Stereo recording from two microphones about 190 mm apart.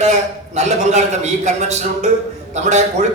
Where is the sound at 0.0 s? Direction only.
35° right (ahead or behind).